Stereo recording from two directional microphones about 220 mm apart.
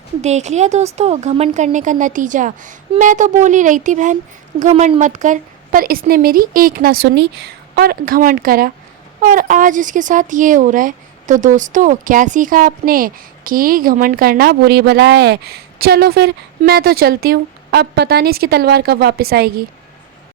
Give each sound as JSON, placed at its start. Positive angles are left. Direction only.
{"t": 0.2, "sound": "a woman's voice", "side_deg": -30}